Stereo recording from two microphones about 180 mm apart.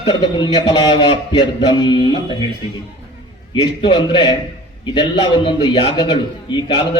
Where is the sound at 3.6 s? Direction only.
25° left (ahead or behind).